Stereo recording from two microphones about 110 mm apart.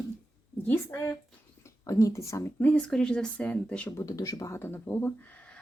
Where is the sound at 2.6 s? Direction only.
10° left (ahead or behind).